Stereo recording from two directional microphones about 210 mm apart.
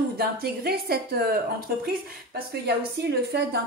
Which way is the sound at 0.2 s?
50° right (ahead or behind).